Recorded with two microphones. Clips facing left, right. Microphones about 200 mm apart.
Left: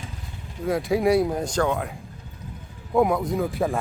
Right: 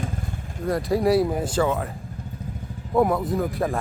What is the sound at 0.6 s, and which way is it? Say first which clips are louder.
Speech: even; centre (ahead or behind).